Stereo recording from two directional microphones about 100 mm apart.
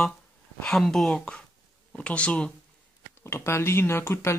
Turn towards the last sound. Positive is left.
turn(degrees=25)  # may be behind; listen again after turning